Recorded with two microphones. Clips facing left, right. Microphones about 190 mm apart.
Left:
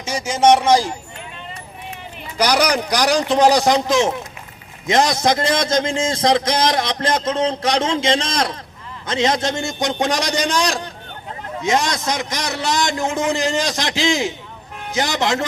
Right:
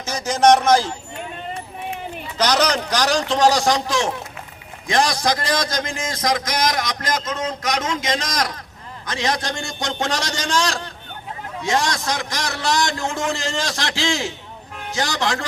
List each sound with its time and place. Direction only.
0.0 s speech: 10° left (ahead or behind)
2.4 s a man's voice: 10° left (ahead or behind)